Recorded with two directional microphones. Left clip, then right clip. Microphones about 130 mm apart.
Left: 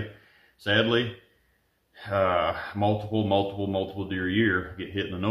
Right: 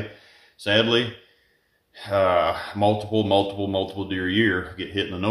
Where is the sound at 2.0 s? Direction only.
30° right (ahead or behind).